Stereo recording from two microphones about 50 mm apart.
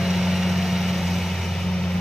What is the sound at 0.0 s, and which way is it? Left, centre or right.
Vehicle, centre.